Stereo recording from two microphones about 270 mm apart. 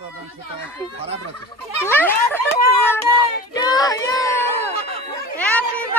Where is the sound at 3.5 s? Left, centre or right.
Centre.